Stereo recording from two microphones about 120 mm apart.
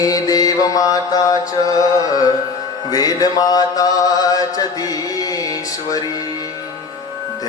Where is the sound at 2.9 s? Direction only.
30° left (ahead or behind).